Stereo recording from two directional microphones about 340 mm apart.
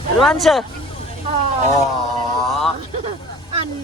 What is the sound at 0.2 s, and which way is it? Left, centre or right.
Speech, centre.